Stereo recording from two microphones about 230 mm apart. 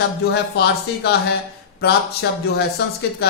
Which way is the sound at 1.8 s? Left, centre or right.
Left.